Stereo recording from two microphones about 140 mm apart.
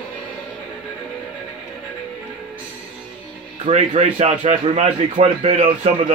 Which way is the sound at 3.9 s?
55° right (ahead or behind).